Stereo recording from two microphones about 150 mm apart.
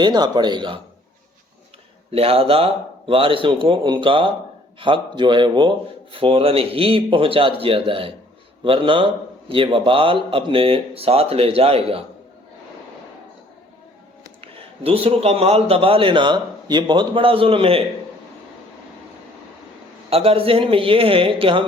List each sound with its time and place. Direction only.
0.0 s speech: 30° right (ahead or behind)
2.0 s a man's voice: 40° right (ahead or behind)
14.4 s a man's voice: 40° right (ahead or behind)
20.1 s a man's voice: 40° right (ahead or behind)